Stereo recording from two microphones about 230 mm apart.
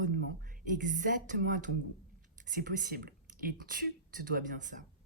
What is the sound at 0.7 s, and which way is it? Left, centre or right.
Speech, right.